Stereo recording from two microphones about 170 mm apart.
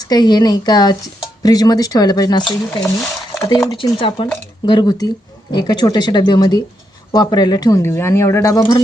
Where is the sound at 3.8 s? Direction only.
30° left (ahead or behind).